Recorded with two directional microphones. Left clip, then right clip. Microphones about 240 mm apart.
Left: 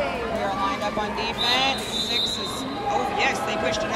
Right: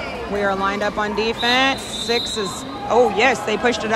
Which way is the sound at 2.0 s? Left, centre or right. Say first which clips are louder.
Right 6 dB; centre.